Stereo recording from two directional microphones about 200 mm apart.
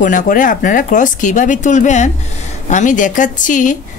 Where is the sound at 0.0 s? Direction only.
40° left (ahead or behind).